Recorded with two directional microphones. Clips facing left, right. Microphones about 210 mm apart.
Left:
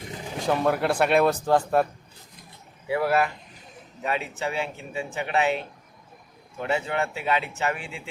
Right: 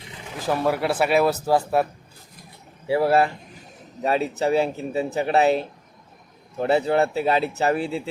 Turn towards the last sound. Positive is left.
turn(degrees=-35)  # may be behind; listen again after turning